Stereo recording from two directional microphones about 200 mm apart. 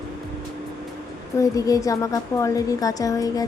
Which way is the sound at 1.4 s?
15° left (ahead or behind).